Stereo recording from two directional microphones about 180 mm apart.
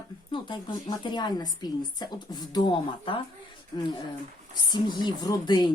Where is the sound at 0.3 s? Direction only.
25° left (ahead or behind).